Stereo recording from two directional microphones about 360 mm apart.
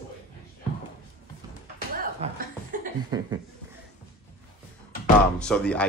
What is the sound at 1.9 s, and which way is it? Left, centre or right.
Chuckle, right.